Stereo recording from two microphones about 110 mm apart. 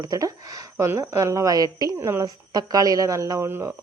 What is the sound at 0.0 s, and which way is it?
A woman's voice, 35° right (ahead or behind).